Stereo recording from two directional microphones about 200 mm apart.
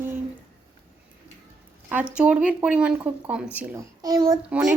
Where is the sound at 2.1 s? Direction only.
5° right (ahead or behind).